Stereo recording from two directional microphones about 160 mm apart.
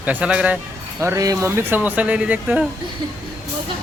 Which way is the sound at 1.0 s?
20° right (ahead or behind).